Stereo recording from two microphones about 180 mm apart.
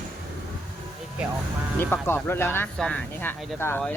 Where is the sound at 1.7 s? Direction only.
10° left (ahead or behind).